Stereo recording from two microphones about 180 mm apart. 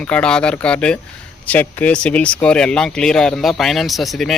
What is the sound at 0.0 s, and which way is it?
Speech, 5° left (ahead or behind).